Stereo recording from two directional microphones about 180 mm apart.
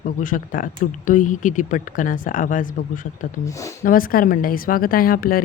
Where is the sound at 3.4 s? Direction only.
15° left (ahead or behind).